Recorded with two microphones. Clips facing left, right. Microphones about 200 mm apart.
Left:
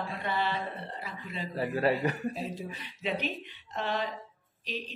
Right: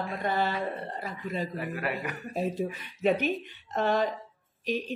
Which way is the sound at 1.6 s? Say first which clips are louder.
Left 5 dB; 30° left (ahead or behind).